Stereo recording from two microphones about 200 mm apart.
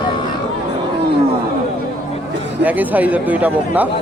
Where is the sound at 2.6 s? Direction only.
10° right (ahead or behind).